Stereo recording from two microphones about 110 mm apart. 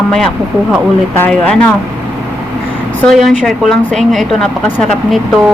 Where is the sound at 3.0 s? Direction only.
Centre (ahead or behind).